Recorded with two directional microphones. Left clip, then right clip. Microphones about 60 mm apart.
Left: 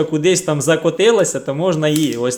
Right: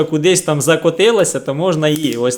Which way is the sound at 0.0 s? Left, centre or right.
Right.